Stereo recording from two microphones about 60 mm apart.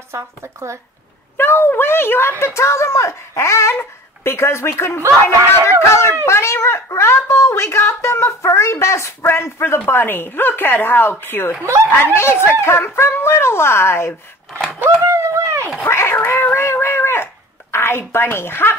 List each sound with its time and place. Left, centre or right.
0.1 s speech: right
1.3 s speech: left
11.6 s speech: right
12.0 s speech: left
15.0 s a sound: right
15.8 s a sound: left